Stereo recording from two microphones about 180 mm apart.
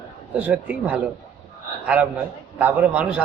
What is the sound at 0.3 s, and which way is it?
Speech, 10° right (ahead or behind).